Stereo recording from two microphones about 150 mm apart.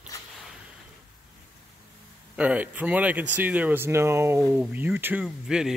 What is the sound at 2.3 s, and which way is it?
Speech, 10° right (ahead or behind).